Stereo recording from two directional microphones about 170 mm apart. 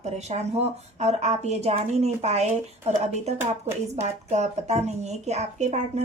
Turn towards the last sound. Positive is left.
turn(degrees=-40)  # may be behind; listen again after turning